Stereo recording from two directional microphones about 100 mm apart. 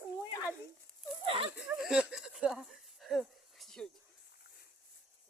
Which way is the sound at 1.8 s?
10° right (ahead or behind).